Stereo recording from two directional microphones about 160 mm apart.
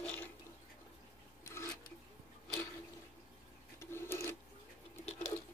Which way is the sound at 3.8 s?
15° left (ahead or behind).